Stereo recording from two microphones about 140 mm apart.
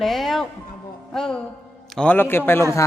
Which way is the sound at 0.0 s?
Centre (ahead or behind).